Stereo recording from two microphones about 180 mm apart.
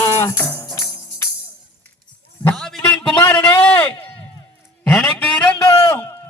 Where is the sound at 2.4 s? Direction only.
5° left (ahead or behind).